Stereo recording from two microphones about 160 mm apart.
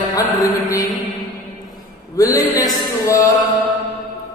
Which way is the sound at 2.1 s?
20° left (ahead or behind).